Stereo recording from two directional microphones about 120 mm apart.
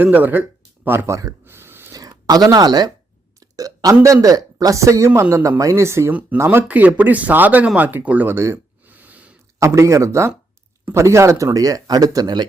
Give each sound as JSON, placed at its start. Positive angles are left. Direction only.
{"t": 0.0, "sound": "speech", "side_deg": -15}
{"t": 1.9, "sound": "a sound", "side_deg": -30}
{"t": 3.4, "sound": "burping", "side_deg": -30}
{"t": 4.0, "sound": "speech", "side_deg": -30}
{"t": 7.8, "sound": "a sound", "side_deg": -15}
{"t": 9.6, "sound": "speech", "side_deg": -25}